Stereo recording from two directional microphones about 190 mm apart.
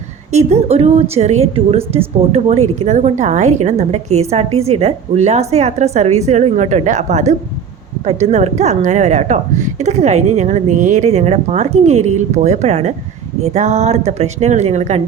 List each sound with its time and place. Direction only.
0.3 s a woman's voice: 35° right (ahead or behind)